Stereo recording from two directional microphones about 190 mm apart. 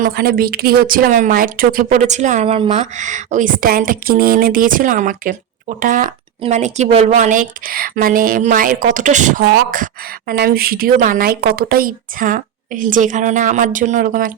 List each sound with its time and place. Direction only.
0.0 s speech: 50° right (ahead or behind)